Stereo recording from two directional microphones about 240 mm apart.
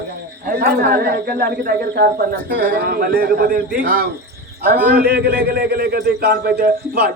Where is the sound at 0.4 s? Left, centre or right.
Right.